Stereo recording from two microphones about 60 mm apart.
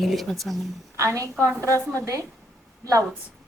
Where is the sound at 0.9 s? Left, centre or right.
Right.